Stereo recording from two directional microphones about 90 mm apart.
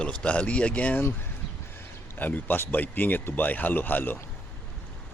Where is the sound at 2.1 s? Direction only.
20° left (ahead or behind).